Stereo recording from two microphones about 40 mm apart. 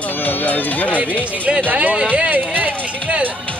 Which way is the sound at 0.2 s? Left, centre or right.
Left.